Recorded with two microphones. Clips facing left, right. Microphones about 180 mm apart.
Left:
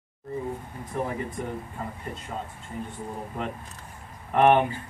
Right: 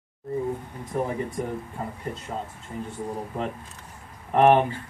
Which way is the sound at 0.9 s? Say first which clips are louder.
Right 3 dB; 40° right (ahead or behind).